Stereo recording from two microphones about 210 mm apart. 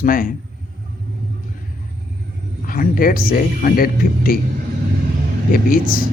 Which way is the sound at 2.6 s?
40° left (ahead or behind).